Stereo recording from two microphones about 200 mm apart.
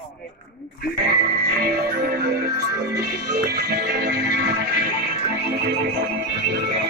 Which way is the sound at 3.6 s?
55° right (ahead or behind).